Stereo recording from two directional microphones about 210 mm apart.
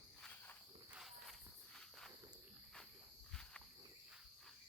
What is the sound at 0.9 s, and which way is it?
Cricket, centre (ahead or behind).